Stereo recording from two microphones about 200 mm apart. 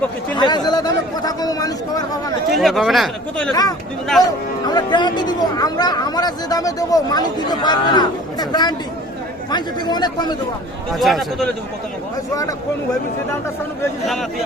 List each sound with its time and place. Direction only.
0.3 s chatter: 20° left (ahead or behind)
2.6 s speech: centre (ahead or behind)
3.5 s speech: 20° left (ahead or behind)
4.2 s speech: centre (ahead or behind)
4.7 s speech: 20° left (ahead or behind)
10.9 s speech: centre (ahead or behind)
12.3 s speech: 15° left (ahead or behind)